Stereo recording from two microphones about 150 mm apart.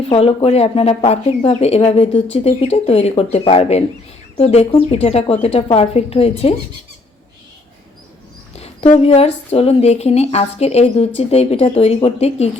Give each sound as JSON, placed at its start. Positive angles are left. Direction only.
{"t": 0.0, "sound": "speech", "side_deg": 40}
{"t": 8.5, "sound": "speech", "side_deg": 50}